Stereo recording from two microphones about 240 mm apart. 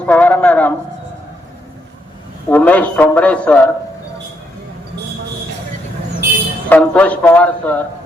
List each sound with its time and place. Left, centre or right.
0.0 s a man's voice: centre
2.5 s a man's voice: centre
6.7 s speech: centre